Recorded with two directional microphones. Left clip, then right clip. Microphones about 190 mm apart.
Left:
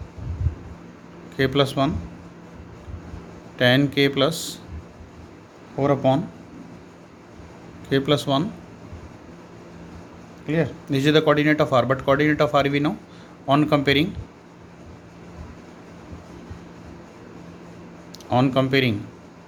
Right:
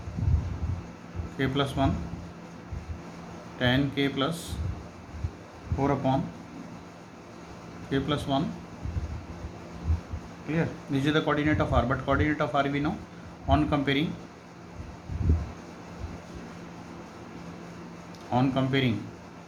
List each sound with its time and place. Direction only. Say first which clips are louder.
1.4 s speech: left 7 dB; 50° left (ahead or behind)
3.6 s speech: left 8 dB; 55° left (ahead or behind)
5.8 s speech: left 7 dB; 50° left (ahead or behind)
7.9 s speech: left 8 dB; 55° left (ahead or behind)
10.5 s speech: left 7 dB; 50° left (ahead or behind)
18.3 s speech: left 7 dB; 50° left (ahead or behind)